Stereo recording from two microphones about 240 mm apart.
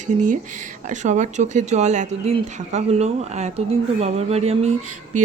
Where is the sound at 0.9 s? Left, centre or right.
Right.